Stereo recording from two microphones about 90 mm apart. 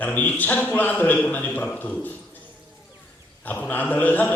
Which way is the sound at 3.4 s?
20° left (ahead or behind).